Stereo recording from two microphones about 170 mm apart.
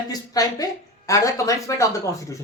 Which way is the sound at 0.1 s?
20° left (ahead or behind).